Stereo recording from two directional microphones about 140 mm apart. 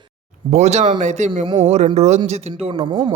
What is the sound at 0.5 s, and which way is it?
Speech, 50° right (ahead or behind).